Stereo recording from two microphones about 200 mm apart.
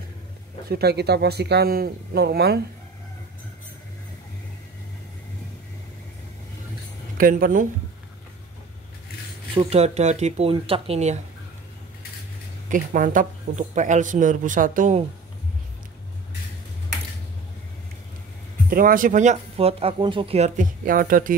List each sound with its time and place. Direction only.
0.7 s speech: 55° right (ahead or behind)
7.2 s speech: 45° right (ahead or behind)
9.6 s speech: 30° right (ahead or behind)
12.6 s speech: 40° right (ahead or behind)
18.7 s speech: 45° right (ahead or behind)